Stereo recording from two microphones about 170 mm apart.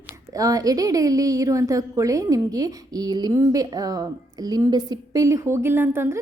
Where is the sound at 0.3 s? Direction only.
20° right (ahead or behind).